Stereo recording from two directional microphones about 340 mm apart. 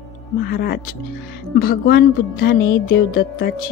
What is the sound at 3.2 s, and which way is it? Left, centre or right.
Speech, left.